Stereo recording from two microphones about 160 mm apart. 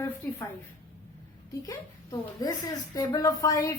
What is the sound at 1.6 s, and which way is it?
A woman's voice, 25° left (ahead or behind).